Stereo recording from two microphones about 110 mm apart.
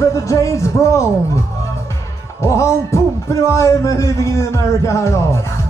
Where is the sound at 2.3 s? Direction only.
25° left (ahead or behind).